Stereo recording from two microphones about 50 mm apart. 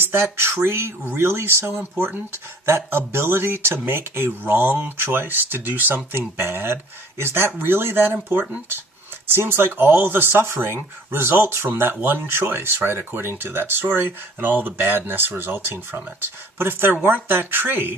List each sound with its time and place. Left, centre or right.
0.0 s speech: right
1.8 s speech: right